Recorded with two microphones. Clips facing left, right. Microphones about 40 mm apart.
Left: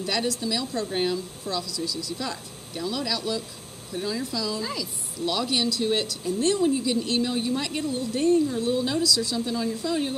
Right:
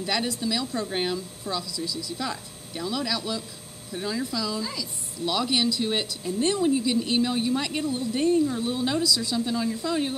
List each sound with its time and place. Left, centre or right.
0.0 s speech: centre
4.6 s a woman's voice: centre
5.2 s speech: centre
6.6 s speech: centre; by 9.4 s right
9.4 s speech: centre